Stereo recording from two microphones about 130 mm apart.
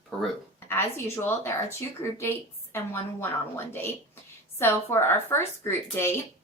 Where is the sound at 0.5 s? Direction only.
20° left (ahead or behind).